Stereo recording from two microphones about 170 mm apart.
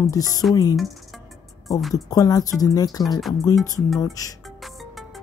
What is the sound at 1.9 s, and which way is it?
Speech, 20° left (ahead or behind).